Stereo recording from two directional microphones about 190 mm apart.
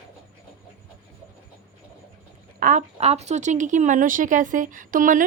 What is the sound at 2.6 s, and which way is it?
Speech, 45° right (ahead or behind).